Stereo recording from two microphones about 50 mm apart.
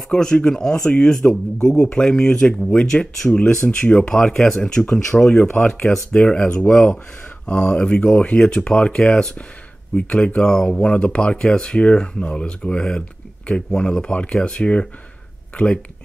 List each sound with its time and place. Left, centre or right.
0.1 s speech: centre